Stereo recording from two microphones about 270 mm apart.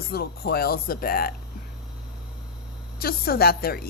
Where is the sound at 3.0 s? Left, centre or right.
Left.